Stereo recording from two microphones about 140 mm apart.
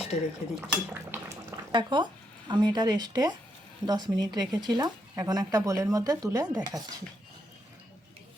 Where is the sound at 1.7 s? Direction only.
30° right (ahead or behind).